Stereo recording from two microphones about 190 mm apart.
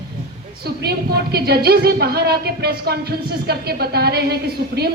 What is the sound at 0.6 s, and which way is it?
A woman's voice, 55° right (ahead or behind).